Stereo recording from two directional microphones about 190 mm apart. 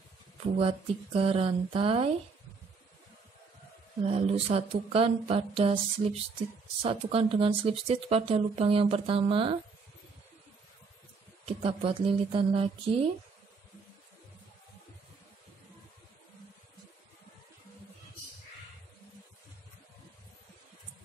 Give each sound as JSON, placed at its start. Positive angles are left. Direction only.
{"t": 0.6, "sound": "speech", "side_deg": -30}
{"t": 4.0, "sound": "speech", "side_deg": -30}
{"t": 11.4, "sound": "speech", "side_deg": -30}